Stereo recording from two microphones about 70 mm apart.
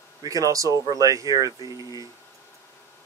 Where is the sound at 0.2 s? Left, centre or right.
Right.